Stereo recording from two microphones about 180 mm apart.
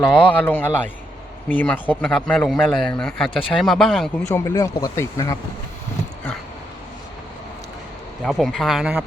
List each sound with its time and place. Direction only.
0.3 s speech: 10° left (ahead or behind)
4.3 s speech: 15° left (ahead or behind)
8.2 s speech: centre (ahead or behind)